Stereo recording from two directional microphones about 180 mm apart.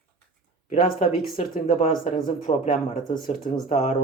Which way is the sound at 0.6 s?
50° left (ahead or behind).